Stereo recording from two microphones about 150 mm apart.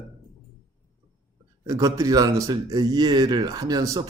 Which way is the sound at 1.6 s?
20° right (ahead or behind).